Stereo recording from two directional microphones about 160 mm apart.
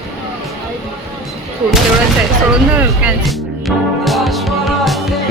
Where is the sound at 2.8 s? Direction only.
10° right (ahead or behind).